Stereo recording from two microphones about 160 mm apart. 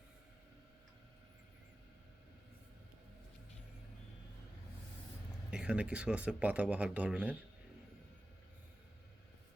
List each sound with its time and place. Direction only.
5.5 s speech: 5° right (ahead or behind)